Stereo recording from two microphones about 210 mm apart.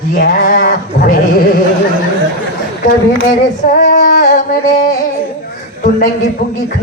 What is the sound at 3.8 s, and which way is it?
Female singing, 40° left (ahead or behind).